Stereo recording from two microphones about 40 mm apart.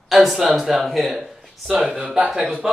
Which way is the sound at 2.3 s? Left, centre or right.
Right.